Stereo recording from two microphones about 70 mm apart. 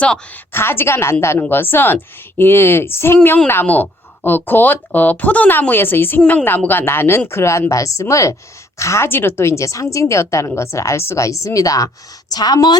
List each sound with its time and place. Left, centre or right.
0.5 s a woman's voice: left
9.0 s a woman's voice: left
12.3 s a woman's voice: left